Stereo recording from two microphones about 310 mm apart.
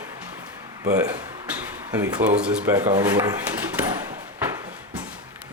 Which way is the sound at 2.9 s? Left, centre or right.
Centre.